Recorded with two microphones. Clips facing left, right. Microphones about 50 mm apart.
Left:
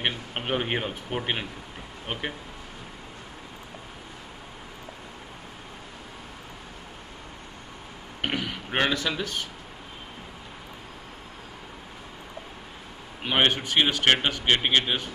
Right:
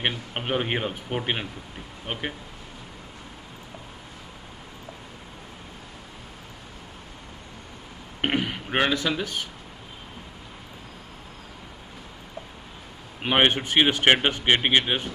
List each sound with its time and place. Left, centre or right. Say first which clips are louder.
0.0 s speech: right 1 dB; centre
8.2 s a sound: right 4 dB; right
8.6 s speech: right 1 dB; centre
13.2 s speech: right 2 dB; right